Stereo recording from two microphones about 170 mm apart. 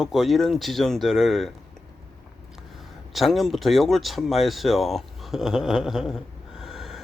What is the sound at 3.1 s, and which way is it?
Speech, centre (ahead or behind).